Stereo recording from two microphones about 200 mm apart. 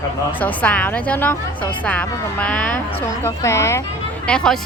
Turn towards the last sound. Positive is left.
turn(degrees=5)  # may be behind; listen again after turning